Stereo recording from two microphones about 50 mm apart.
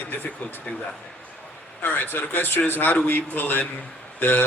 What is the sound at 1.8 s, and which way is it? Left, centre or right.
A man's voice, left.